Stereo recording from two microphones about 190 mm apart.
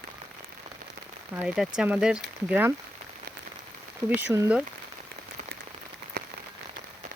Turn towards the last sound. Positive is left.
turn(degrees=-60)  # may be behind; listen again after turning